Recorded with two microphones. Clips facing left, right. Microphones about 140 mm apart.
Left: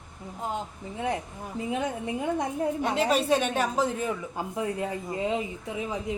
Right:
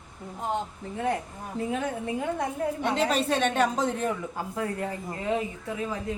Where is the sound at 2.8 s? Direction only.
5° left (ahead or behind).